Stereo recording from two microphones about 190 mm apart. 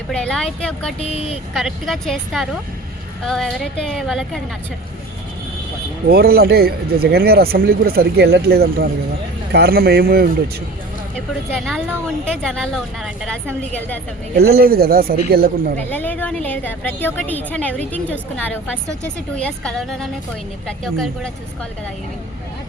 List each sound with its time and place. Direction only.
0.1 s a woman's voice: 5° left (ahead or behind)
0.9 s speech: 30° left (ahead or behind)
1.5 s a woman's voice: centre (ahead or behind)
6.1 s speech: 55° right (ahead or behind)
11.5 s a woman's voice: centre (ahead or behind)
14.3 s speech: 55° right (ahead or behind)
15.9 s a woman's voice: 10° left (ahead or behind)